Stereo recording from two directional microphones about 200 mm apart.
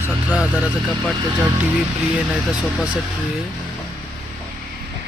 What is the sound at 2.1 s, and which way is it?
Speech, 5° right (ahead or behind).